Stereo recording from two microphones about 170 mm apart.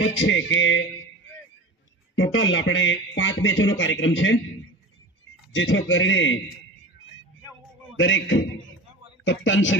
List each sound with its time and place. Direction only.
0.0 s speech: 90° left
2.2 s speech: 90° left
5.5 s speech: 90° left
7.9 s speech: 90° left